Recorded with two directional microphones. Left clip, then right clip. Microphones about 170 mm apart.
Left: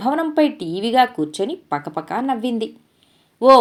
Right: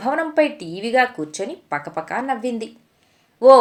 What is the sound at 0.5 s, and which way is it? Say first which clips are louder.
Speech: left 5 dB; 60° left (ahead or behind).